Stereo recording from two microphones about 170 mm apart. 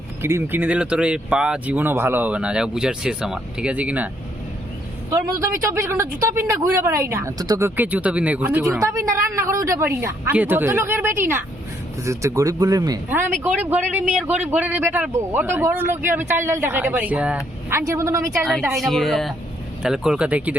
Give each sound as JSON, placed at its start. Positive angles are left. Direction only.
{"t": 0.2, "sound": "a woman's voice", "side_deg": -15}
{"t": 5.1, "sound": "a woman's voice", "side_deg": -15}
{"t": 13.4, "sound": "a woman's voice", "side_deg": -10}
{"t": 18.7, "sound": "a woman's voice", "side_deg": 0}